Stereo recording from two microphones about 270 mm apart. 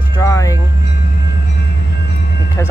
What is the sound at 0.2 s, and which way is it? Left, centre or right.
Music, centre.